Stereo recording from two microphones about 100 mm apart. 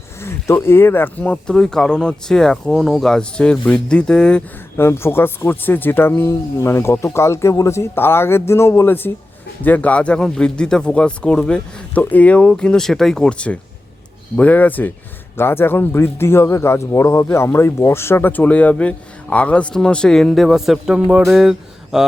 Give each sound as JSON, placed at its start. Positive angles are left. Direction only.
{"t": 0.2, "sound": "speech", "side_deg": 25}
{"t": 4.8, "sound": "speech", "side_deg": 25}